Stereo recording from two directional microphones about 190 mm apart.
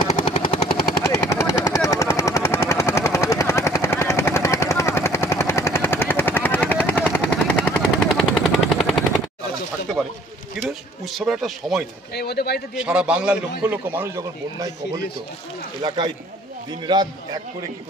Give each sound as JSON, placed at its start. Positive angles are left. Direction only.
{"t": 0.0, "sound": "helicopter", "side_deg": 30}
{"t": 1.0, "sound": "helicopter", "side_deg": 15}
{"t": 11.1, "sound": "a man's voice", "side_deg": 0}
{"t": 12.1, "sound": "speech", "side_deg": 55}
{"t": 12.7, "sound": "a man's voice", "side_deg": -5}
{"t": 15.8, "sound": "a man's voice", "side_deg": -20}